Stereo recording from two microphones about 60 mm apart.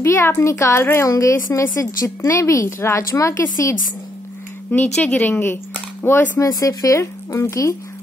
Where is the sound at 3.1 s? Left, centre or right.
Left.